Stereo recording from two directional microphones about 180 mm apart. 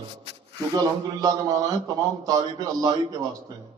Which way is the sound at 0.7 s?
20° right (ahead or behind).